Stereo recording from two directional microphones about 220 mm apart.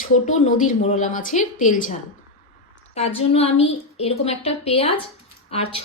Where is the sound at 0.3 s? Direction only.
35° left (ahead or behind).